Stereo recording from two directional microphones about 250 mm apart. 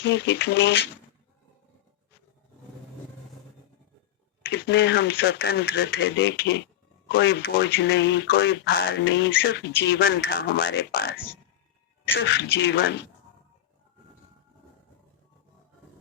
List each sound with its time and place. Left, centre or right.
0.0 s speech: left
4.4 s speech: left